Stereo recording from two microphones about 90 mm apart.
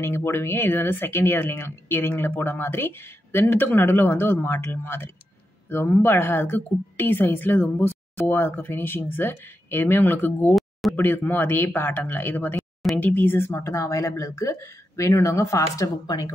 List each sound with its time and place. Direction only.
0.0 s speech: 30° left (ahead or behind)
10.5 s a sound: centre (ahead or behind)
11.0 s speech: 20° left (ahead or behind); by 16.3 s 45° left (ahead or behind)